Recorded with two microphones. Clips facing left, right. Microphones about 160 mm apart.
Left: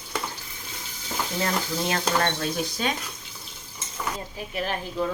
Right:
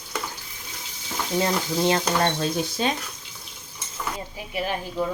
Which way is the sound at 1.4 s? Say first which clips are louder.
Right 5 dB; 25° right (ahead or behind).